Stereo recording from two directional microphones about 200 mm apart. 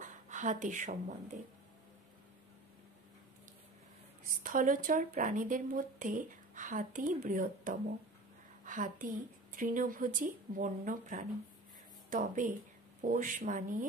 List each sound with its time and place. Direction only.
0.0 s speech: 40° right (ahead or behind)
4.3 s a woman's voice: 40° right (ahead or behind)